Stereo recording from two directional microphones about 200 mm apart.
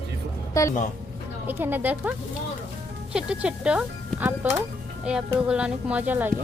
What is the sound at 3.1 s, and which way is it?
Speech, 5° right (ahead or behind).